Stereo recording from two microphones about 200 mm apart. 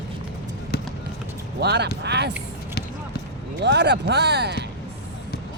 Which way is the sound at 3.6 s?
60° right (ahead or behind).